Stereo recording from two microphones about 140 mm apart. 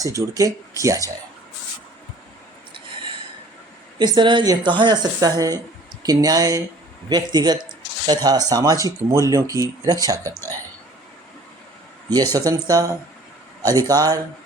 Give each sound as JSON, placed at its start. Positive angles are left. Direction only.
{"t": 0.0, "sound": "speech", "side_deg": -25}
{"t": 3.9, "sound": "speech", "side_deg": -30}
{"t": 12.1, "sound": "speech", "side_deg": -25}